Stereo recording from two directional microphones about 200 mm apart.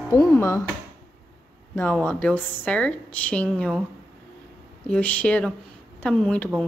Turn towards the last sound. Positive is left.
turn(degrees=5)  # may be behind; listen again after turning